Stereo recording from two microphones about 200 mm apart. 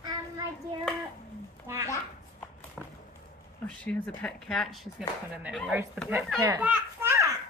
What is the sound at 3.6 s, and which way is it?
A child's voice, 5° left (ahead or behind).